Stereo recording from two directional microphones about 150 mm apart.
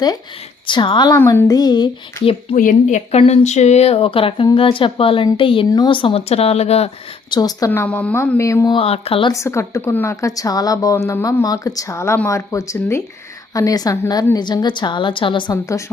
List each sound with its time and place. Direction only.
0.7 s speech: 30° left (ahead or behind)
1.2 s a woman's voice: 20° left (ahead or behind)
2.6 s speech: 60° left (ahead or behind)
7.3 s a woman's voice: 25° left (ahead or behind)
7.7 s a woman's voice: 10° left (ahead or behind)
8.7 s speech: 40° left (ahead or behind)
9.3 s a woman's voice: 20° left (ahead or behind)